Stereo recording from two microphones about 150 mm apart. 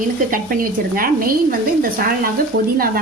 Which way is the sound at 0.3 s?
70° right (ahead or behind).